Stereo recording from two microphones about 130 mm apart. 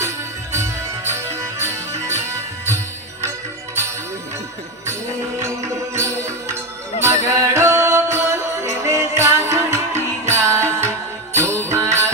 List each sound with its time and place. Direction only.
0.5 s music: 20° right (ahead or behind)
5.4 s music: 20° right (ahead or behind)